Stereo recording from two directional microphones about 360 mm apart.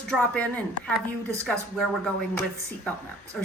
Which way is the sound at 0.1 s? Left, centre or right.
Centre.